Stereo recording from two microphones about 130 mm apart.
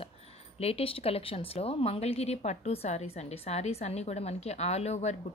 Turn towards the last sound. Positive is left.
turn(degrees=60)  # may be behind; listen again after turning